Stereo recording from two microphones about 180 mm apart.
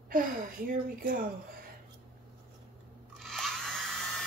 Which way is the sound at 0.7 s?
45° right (ahead or behind).